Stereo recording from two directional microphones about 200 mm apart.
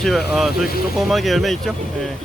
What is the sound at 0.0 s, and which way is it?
Speech, centre (ahead or behind).